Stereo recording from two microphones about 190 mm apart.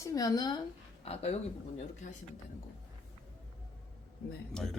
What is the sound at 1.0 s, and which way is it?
Speech, 30° left (ahead or behind).